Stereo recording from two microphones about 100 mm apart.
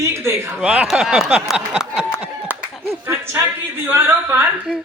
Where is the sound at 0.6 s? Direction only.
10° right (ahead or behind).